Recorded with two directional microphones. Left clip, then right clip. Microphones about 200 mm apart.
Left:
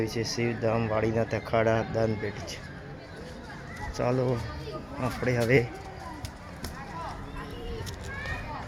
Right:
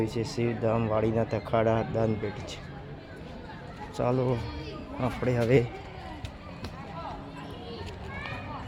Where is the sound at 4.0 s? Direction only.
5° right (ahead or behind).